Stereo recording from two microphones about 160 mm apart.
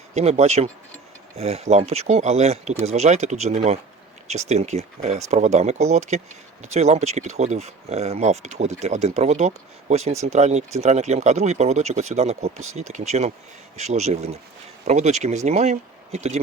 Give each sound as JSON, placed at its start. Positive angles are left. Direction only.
{"t": 0.1, "sound": "speech", "side_deg": -40}